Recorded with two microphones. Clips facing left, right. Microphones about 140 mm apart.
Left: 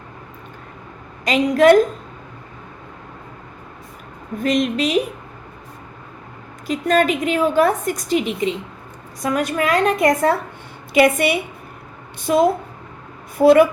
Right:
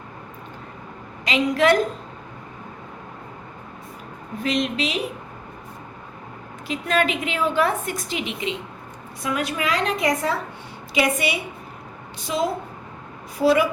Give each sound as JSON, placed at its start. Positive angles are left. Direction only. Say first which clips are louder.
{"t": 1.2, "sound": "a woman's voice", "louder": "left 6 dB", "side_deg": 45}
{"t": 4.4, "sound": "a woman's voice", "louder": "left 5 dB", "side_deg": 45}
{"t": 6.7, "sound": "a woman's voice", "louder": "left 5 dB", "side_deg": 40}